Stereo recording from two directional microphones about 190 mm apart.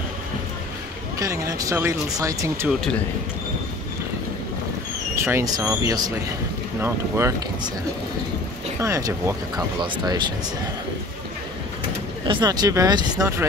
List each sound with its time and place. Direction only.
1.2 s speech: 15° right (ahead or behind)
2.7 s speech: centre (ahead or behind)
5.1 s speech: 15° right (ahead or behind)
8.7 s speech: 15° right (ahead or behind)
12.3 s speech: 20° right (ahead or behind)